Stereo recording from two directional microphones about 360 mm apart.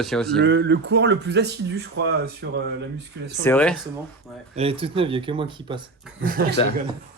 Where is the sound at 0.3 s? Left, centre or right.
Right.